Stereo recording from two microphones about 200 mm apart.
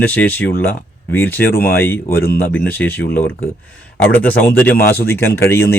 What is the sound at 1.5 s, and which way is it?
Speech, 50° left (ahead or behind).